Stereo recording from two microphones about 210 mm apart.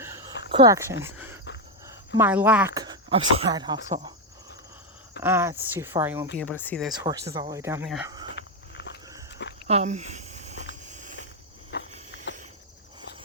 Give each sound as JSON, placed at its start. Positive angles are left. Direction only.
{"t": 0.0, "sound": "a sound", "side_deg": -10}
{"t": 0.5, "sound": "speech", "side_deg": -15}
{"t": 2.7, "sound": "speech", "side_deg": -20}
{"t": 5.2, "sound": "speech", "side_deg": -10}
{"t": 6.4, "sound": "speech", "side_deg": 10}
{"t": 6.9, "sound": "speech", "side_deg": -15}
{"t": 8.0, "sound": "cricket", "side_deg": -20}
{"t": 8.4, "sound": "walk", "side_deg": 55}
{"t": 9.6, "sound": "a sound", "side_deg": -30}
{"t": 11.7, "sound": "cricket", "side_deg": 50}